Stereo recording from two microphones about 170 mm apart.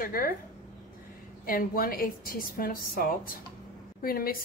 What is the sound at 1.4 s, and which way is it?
A woman's voice, 60° left (ahead or behind).